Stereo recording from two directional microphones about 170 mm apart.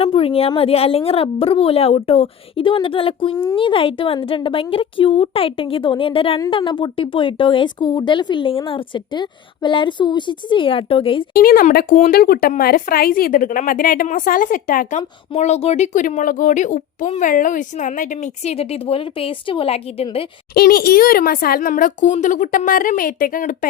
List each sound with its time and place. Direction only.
0.0 s a woman's voice: 35° left (ahead or behind)
11.3 s speech: 60° left (ahead or behind); by 20.2 s 35° left (ahead or behind)
20.5 s speech: 60° left (ahead or behind)